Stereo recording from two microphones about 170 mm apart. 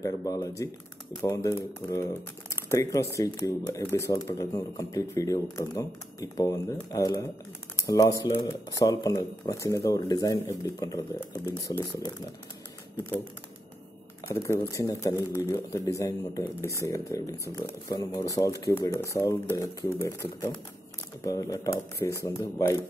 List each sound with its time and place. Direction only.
0.0 s speech: 20° left (ahead or behind)
14.3 s speech: 15° left (ahead or behind)